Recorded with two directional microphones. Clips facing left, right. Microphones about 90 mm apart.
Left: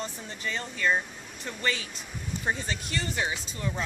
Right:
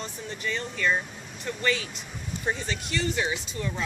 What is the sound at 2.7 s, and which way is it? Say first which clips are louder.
Speech: right 3 dB; 30° left (ahead or behind).